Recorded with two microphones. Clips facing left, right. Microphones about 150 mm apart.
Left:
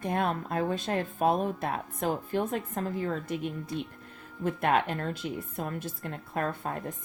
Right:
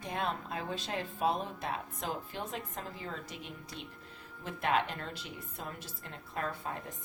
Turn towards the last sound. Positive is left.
turn(degrees=50)  # may be behind; listen again after turning